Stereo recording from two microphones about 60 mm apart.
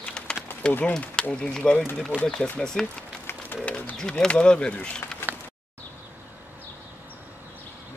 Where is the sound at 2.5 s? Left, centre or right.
Centre.